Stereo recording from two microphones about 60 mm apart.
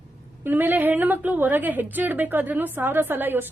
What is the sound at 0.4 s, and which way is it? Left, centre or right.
A woman's voice, right.